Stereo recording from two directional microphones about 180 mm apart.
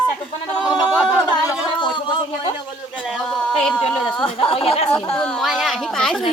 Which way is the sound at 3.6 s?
5° left (ahead or behind).